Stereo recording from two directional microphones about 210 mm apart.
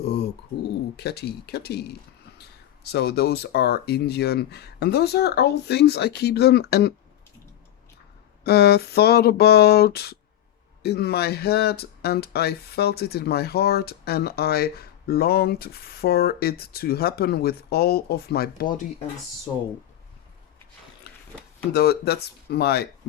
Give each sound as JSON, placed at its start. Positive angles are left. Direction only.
{"t": 0.0, "sound": "pigeon", "side_deg": 50}
{"t": 0.9, "sound": "speech", "side_deg": 50}
{"t": 8.4, "sound": "speech", "side_deg": 50}
{"t": 21.1, "sound": "a sound", "side_deg": 50}
{"t": 21.7, "sound": "speech", "side_deg": 50}